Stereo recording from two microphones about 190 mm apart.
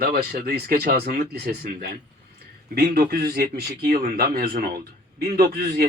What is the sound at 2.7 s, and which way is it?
A man's voice, 50° right (ahead or behind).